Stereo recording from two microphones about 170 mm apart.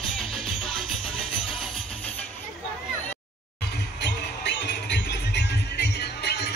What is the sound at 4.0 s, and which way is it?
Music, 85° left.